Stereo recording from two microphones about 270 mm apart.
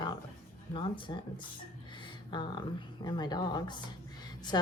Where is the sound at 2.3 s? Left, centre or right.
Centre.